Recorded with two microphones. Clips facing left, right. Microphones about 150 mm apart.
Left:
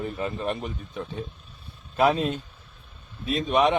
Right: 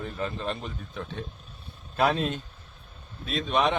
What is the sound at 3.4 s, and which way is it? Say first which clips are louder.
Speech: left 4 dB; 5° left (ahead or behind).